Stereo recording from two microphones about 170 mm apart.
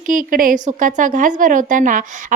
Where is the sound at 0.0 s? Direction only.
55° right (ahead or behind).